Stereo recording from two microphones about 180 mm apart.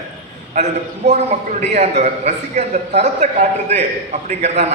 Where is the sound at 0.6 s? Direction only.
40° right (ahead or behind).